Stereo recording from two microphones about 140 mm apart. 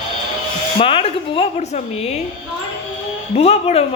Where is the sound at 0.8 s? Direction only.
40° left (ahead or behind).